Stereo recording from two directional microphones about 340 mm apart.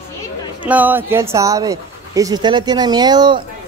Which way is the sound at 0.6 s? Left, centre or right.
Centre.